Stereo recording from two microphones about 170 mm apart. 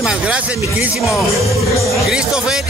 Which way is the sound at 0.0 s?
5° right (ahead or behind).